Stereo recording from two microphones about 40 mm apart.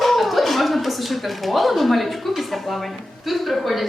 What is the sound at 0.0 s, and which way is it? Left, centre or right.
A woman's voice, centre.